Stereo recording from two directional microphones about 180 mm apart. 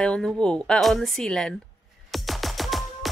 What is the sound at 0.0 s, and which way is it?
Speech, 5° left (ahead or behind).